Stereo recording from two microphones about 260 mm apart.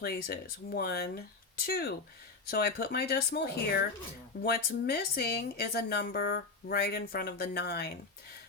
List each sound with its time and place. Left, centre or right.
0.0 s speech: left